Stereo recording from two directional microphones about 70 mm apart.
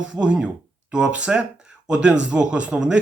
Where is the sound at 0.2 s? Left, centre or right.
Centre.